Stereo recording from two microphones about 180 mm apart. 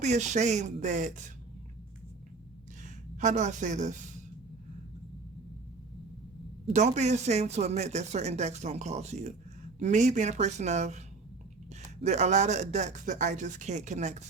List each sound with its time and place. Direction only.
0.0 s speech: 40° right (ahead or behind)
2.8 s speech: 45° right (ahead or behind)
6.7 s speech: 40° right (ahead or behind)
12.0 s speech: 40° right (ahead or behind)